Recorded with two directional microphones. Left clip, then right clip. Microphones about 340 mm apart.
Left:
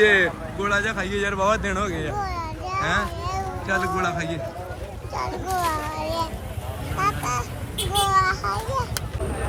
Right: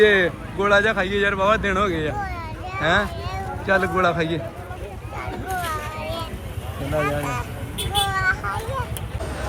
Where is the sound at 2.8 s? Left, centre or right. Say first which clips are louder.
Right 5 dB; centre.